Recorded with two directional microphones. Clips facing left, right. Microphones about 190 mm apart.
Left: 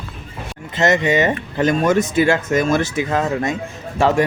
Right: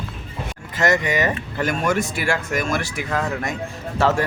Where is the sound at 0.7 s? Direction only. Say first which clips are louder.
Left 4 dB; 25° left (ahead or behind).